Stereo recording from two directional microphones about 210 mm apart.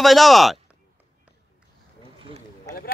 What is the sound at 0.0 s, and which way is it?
Speech, centre (ahead or behind).